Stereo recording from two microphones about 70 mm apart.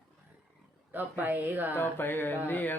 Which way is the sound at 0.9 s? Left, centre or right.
Right.